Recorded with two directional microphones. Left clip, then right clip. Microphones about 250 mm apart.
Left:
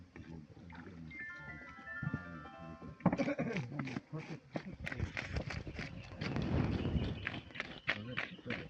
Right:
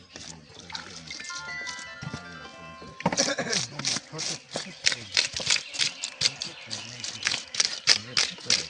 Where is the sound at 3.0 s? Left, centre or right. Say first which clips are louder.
Right 10 dB; right.